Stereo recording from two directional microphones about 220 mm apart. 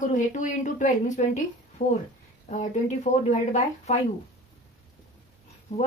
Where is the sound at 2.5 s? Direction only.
35° left (ahead or behind).